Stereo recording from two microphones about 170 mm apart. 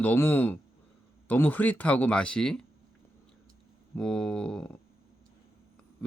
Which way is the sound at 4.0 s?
5° left (ahead or behind).